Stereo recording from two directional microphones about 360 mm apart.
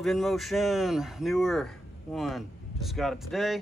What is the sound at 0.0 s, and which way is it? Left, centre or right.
Speech, centre.